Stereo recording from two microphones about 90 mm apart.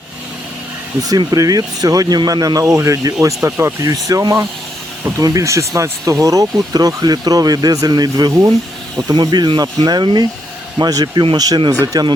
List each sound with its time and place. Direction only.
1.3 s speech: 45° right (ahead or behind)